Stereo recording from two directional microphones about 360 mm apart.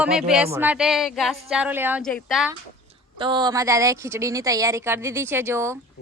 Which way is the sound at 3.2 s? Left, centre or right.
Centre.